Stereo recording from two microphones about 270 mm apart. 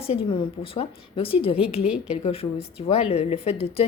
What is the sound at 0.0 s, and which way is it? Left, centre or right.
Speech, left.